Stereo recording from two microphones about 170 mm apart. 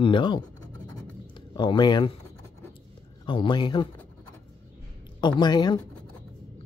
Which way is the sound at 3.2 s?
30° left (ahead or behind).